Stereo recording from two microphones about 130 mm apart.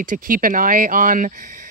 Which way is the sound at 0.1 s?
90° right.